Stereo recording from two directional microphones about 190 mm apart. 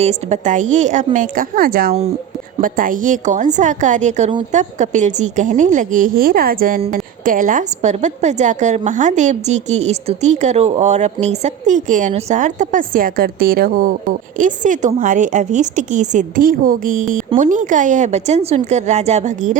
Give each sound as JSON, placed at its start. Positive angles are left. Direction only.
{"t": 0.0, "sound": "a woman's voice", "side_deg": -35}